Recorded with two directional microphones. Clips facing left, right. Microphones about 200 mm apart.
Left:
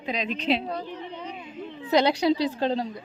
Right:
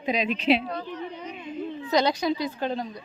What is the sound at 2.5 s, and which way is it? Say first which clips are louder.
Speech: left 3 dB; 30° left (ahead or behind).